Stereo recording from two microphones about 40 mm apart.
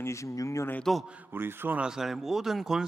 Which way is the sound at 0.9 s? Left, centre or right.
Centre.